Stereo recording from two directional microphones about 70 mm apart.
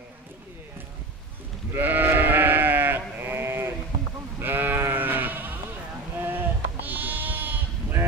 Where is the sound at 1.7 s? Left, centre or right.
Right.